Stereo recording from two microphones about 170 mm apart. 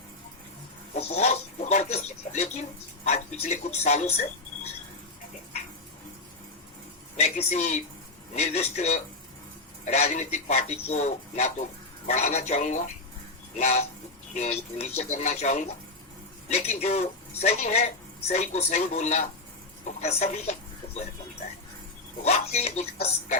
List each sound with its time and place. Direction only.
0.9 s a man's voice: 40° left (ahead or behind)
7.2 s a man's voice: 40° left (ahead or behind)
22.2 s a man's voice: 40° left (ahead or behind)